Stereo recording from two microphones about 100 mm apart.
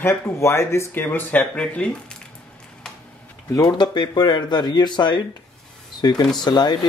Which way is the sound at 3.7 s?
45° left (ahead or behind).